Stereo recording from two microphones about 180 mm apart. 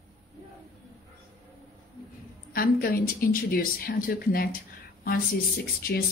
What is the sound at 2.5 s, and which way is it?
A woman's voice, 55° left (ahead or behind).